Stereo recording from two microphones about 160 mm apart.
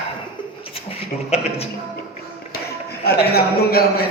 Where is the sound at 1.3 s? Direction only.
40° left (ahead or behind).